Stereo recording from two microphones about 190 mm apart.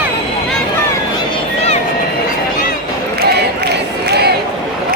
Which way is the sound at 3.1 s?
60° right (ahead or behind).